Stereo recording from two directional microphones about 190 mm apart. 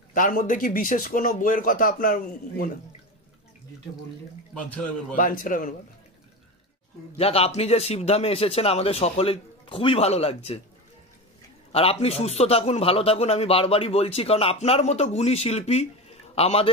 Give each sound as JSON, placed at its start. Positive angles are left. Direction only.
{"t": 0.1, "sound": "a man's voice", "side_deg": 45}
{"t": 5.1, "sound": "a man's voice", "side_deg": 45}
{"t": 7.2, "sound": "a man's voice", "side_deg": 30}
{"t": 11.7, "sound": "a man's voice", "side_deg": 30}